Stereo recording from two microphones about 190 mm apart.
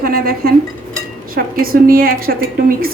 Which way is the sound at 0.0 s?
50° right (ahead or behind).